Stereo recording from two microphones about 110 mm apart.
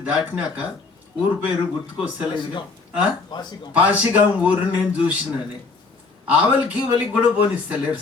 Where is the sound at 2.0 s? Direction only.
50° left (ahead or behind).